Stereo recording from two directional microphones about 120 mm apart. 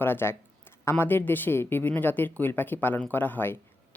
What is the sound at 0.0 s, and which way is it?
Speech, 20° left (ahead or behind).